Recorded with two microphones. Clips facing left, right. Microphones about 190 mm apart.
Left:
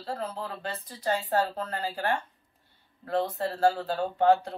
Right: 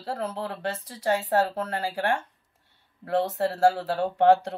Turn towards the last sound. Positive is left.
turn(degrees=-80)